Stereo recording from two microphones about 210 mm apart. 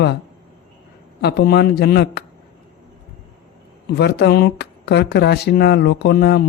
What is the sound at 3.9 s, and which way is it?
Speech, 50° left (ahead or behind).